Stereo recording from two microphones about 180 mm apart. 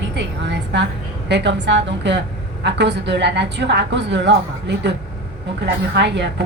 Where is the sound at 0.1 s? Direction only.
70° right (ahead or behind).